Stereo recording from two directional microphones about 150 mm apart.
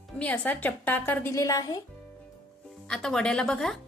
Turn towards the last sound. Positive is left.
turn(degrees=5)  # may be behind; listen again after turning